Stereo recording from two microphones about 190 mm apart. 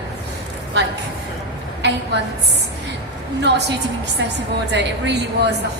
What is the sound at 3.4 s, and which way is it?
Speech, 60° right (ahead or behind).